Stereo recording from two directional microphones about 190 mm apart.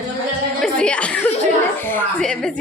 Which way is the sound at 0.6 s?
5° left (ahead or behind).